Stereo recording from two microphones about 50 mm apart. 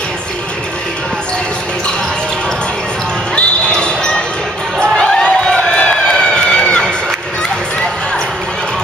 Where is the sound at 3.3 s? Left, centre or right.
Centre.